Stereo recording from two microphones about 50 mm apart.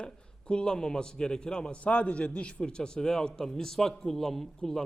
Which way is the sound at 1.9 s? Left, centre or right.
Left.